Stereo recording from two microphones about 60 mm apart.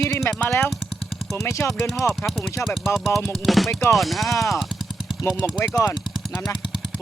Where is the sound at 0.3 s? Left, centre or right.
Left.